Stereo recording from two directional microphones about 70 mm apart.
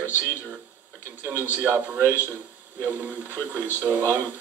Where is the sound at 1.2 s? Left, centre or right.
Right.